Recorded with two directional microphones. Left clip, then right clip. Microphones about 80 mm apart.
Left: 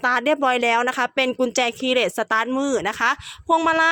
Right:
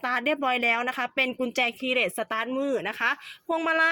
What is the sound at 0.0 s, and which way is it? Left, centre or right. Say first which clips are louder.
Speech: left 7 dB; left.